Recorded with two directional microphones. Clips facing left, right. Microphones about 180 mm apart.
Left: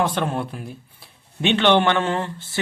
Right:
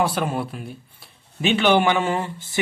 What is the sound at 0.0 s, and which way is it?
Speech, 5° right (ahead or behind).